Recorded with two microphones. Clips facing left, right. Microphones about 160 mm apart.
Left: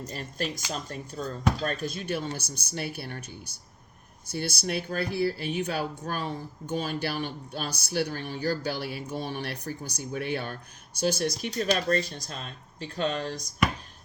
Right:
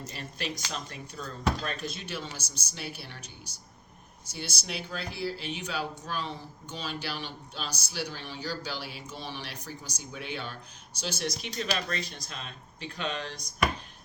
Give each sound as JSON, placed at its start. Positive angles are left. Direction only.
{"t": 0.1, "sound": "speech", "side_deg": 45}